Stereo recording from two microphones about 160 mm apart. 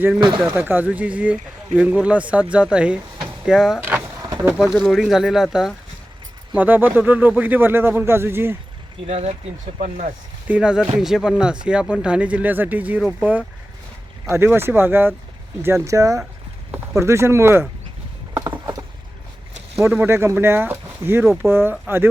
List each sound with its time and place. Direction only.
0.5 s speech: 10° right (ahead or behind)
3.8 s power windows: 10° right (ahead or behind)
4.2 s a sound: 20° right (ahead or behind)
4.5 s speech: 5° left (ahead or behind); by 8.5 s 15° right (ahead or behind)
9.0 s speech: 40° right (ahead or behind)
10.5 s speech: 5° right (ahead or behind)
19.7 s speech: 15° right (ahead or behind)